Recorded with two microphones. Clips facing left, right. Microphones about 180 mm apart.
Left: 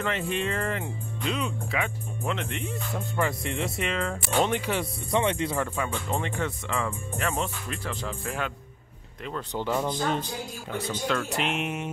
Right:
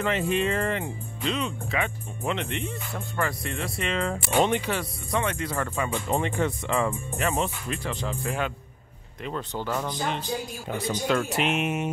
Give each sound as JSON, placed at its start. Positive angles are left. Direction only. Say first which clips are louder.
{"t": 0.0, "sound": "speech", "louder": "right 4 dB", "side_deg": -5}
{"t": 3.8, "sound": "speech", "louder": "right 4 dB", "side_deg": 5}
{"t": 4.1, "sound": "speech", "louder": "right 3 dB", "side_deg": -10}
{"t": 4.6, "sound": "speech", "louder": "even", "side_deg": 15}
{"t": 5.1, "sound": "speech", "louder": "left 3 dB", "side_deg": 25}
{"t": 5.5, "sound": "speech", "louder": "even", "side_deg": 5}
{"t": 6.0, "sound": "speech", "louder": "right 4 dB", "side_deg": -15}
{"t": 7.2, "sound": "speech", "louder": "right 2 dB", "side_deg": -5}
{"t": 9.5, "sound": "speech", "louder": "left 4 dB", "side_deg": 15}
{"t": 10.9, "sound": "speech", "louder": "right 4 dB", "side_deg": -10}